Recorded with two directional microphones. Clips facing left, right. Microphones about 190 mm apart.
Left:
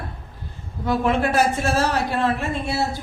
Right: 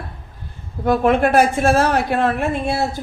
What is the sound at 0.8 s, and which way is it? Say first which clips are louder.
A woman's voice: right 5 dB; 50° right (ahead or behind).